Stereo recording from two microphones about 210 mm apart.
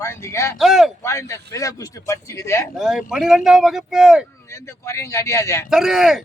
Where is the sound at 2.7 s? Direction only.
Centre (ahead or behind).